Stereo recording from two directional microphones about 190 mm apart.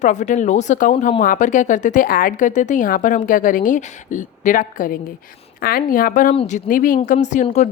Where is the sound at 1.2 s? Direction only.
40° left (ahead or behind).